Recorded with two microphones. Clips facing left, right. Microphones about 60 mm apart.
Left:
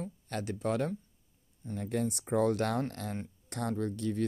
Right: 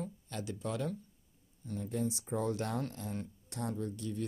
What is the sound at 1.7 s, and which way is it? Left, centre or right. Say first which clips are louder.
Speech: left 3 dB; left.